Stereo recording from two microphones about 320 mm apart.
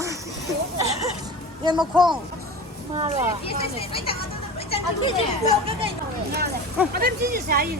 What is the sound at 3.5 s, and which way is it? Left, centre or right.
Speech, centre.